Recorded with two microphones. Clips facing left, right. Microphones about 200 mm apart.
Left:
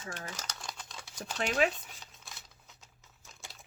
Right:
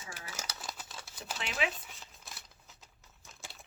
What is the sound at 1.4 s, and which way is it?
Speech, 45° left (ahead or behind).